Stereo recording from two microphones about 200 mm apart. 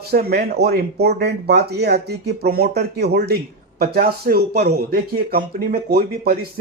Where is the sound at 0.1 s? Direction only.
50° right (ahead or behind).